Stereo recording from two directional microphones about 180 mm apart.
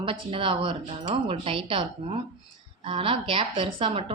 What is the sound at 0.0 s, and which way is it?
Speech, 30° right (ahead or behind).